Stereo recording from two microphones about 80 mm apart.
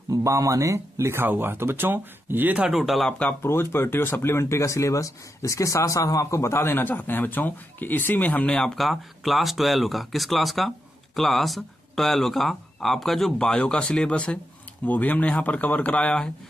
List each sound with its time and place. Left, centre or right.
0.1 s speech: right; by 2.7 s centre
2.7 s speech: centre
3.1 s speech: centre
3.4 s speech: left; by 16.3 s centre